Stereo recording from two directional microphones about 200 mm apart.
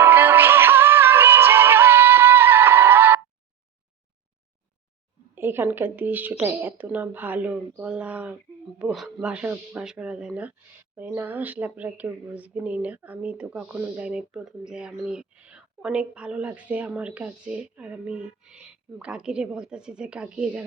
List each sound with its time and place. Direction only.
0.0 s music: 10° right (ahead or behind)
5.3 s a woman's voice: 10° right (ahead or behind)